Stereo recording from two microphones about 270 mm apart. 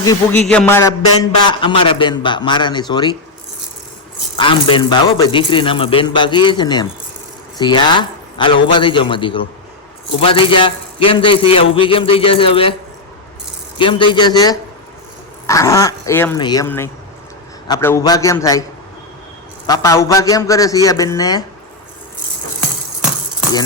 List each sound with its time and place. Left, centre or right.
0.3 s a man's voice: centre
4.4 s a man's voice: centre
10.2 s a sound: centre
13.7 s a man's voice: centre
19.6 s a man's voice: centre